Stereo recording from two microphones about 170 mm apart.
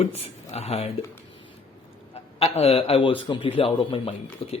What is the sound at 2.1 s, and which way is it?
Speech, 35° left (ahead or behind).